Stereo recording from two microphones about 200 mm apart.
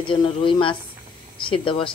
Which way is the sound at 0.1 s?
25° left (ahead or behind).